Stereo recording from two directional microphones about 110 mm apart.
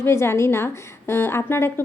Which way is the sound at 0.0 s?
25° left (ahead or behind).